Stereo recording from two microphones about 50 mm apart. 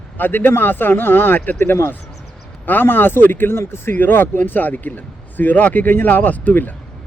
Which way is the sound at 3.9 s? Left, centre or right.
Left.